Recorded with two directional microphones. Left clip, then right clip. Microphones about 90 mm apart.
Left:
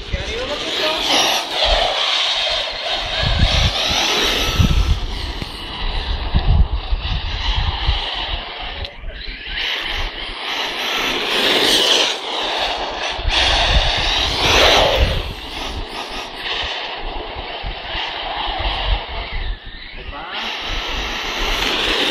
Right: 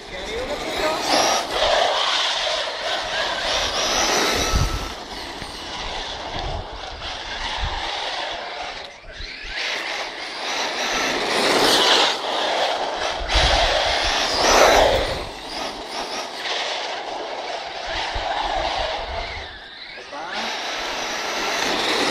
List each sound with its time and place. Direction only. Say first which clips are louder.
0.3 s vehicle: left 4 dB; 90° right
1.0 s a sound: left 2 dB; 45° right (ahead or behind)
1.5 s vehicle: left 2 dB; 25° right (ahead or behind)
4.2 s vehicle: left 3 dB; 65° right (ahead or behind)
7.4 s vehicle: left 3 dB; 40° right (ahead or behind)
9.6 s vehicle: left 4 dB; 50° right (ahead or behind); by 11.5 s 75° right (ahead or behind)
11.7 s vehicle: left 2 dB; 20° right (ahead or behind); by 14.7 s 45° right (ahead or behind)
14.7 s a sound: left 2 dB; 90° right
16.4 s vehicle: left 3 dB; 35° right (ahead or behind)
17.9 s crowd: left 1 dB; 40° right (ahead or behind)
20.3 s vehicle: left 2 dB; 45° right (ahead or behind); by 22.0 s 75° right (ahead or behind)